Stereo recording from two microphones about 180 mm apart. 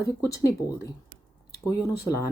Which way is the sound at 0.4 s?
15° left (ahead or behind).